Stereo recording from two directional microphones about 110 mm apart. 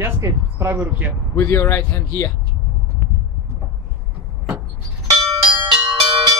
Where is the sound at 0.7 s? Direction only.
15° right (ahead or behind).